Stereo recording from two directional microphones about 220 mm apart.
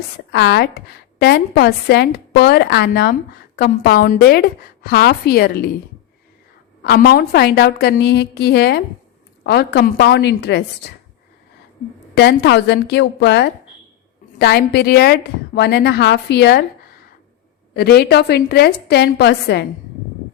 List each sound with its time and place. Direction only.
0.3 s a woman's voice: 50° left (ahead or behind)
6.8 s a woman's voice: 45° left (ahead or behind)
12.1 s a woman's voice: 50° left (ahead or behind)
17.7 s a woman's voice: 45° left (ahead or behind)